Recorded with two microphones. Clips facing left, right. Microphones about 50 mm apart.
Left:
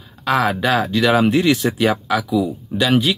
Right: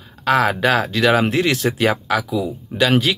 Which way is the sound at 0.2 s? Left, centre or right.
Right.